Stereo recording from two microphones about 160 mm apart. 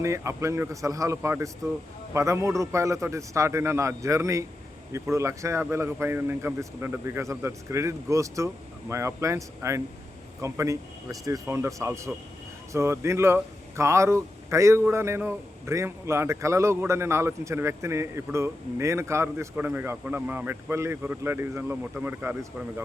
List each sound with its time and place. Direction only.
0.0 s a man's voice: 20° right (ahead or behind)